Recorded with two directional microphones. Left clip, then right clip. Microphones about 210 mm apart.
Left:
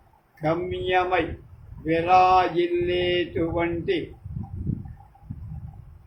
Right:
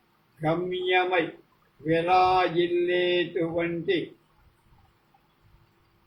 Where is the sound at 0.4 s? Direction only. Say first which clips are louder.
Left 1 dB; 15° left (ahead or behind).